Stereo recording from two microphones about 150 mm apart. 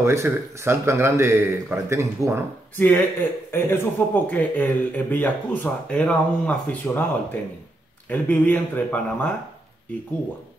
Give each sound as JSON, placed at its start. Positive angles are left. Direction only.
{"t": 0.0, "sound": "speech", "side_deg": -20}
{"t": 2.8, "sound": "speech", "side_deg": 15}
{"t": 8.1, "sound": "speech", "side_deg": 10}